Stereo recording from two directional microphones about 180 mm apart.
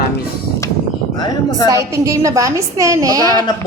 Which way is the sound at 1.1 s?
20° left (ahead or behind).